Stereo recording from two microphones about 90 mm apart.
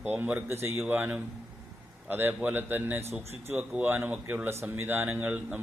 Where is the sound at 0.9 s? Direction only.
15° right (ahead or behind).